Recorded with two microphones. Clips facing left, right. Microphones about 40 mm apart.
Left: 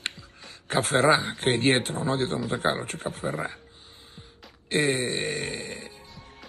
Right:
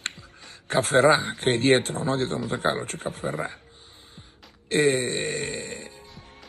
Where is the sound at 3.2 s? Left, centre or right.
Right.